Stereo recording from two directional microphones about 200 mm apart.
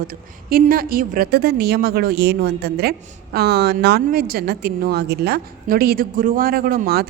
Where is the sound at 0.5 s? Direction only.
45° right (ahead or behind).